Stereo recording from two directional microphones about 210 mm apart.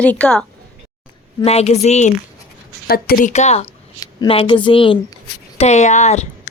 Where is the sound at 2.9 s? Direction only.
45° left (ahead or behind).